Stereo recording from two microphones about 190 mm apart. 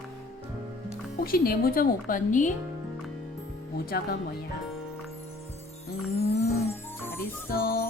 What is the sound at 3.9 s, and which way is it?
Speech, 55° left (ahead or behind).